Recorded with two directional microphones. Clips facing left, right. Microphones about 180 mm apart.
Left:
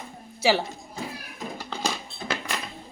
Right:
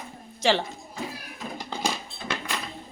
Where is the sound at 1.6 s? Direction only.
15° right (ahead or behind).